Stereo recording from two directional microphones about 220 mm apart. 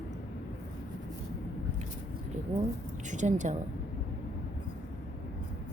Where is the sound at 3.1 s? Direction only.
35° right (ahead or behind).